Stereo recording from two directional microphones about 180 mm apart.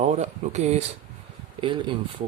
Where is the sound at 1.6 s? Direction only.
25° right (ahead or behind).